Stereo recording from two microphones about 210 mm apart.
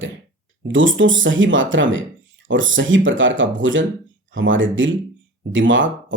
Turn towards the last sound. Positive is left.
turn(degrees=-65)  # may be behind; listen again after turning